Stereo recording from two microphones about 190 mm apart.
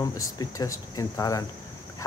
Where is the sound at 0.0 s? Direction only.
20° left (ahead or behind).